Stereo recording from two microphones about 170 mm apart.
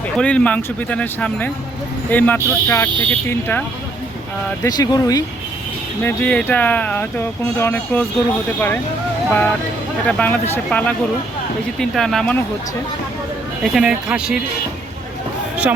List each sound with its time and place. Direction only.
0.2 s speech: 5° left (ahead or behind)
4.6 s speech: 20° left (ahead or behind)
6.0 s speech: 10° left (ahead or behind)
9.3 s speech: 10° left (ahead or behind)
13.7 s speech: 5° right (ahead or behind)